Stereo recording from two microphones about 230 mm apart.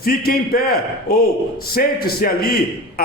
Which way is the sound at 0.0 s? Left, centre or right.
Left.